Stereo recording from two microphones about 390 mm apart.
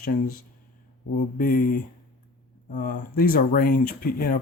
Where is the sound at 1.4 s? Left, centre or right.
Left.